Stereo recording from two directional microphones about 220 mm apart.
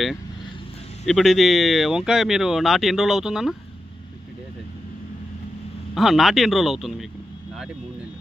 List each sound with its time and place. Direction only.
1.0 s speech: centre (ahead or behind)
5.9 s speech: centre (ahead or behind)